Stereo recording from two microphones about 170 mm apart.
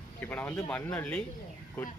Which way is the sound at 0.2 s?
10° left (ahead or behind).